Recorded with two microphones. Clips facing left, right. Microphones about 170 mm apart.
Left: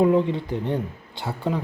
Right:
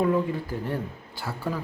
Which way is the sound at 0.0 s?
25° left (ahead or behind).